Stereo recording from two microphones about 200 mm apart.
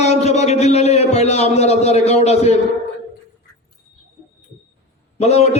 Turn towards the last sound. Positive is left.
turn(degrees=30)  # may be behind; listen again after turning